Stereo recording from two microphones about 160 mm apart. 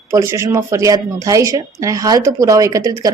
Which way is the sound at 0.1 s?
20° right (ahead or behind).